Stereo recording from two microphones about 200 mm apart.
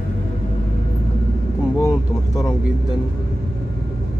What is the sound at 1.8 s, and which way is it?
Vehicle, 15° left (ahead or behind).